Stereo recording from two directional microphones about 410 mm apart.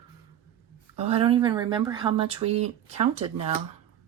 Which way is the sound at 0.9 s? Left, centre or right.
Centre.